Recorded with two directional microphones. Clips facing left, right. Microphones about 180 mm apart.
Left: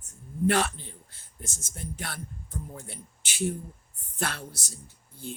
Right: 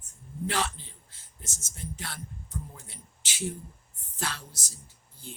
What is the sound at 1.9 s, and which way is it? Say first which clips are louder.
Speech: left 3 dB; 60° left (ahead or behind).